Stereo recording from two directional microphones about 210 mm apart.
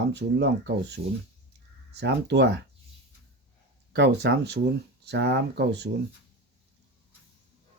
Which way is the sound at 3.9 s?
55° right (ahead or behind).